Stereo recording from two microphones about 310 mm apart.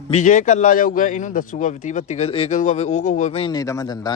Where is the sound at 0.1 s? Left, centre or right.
Left.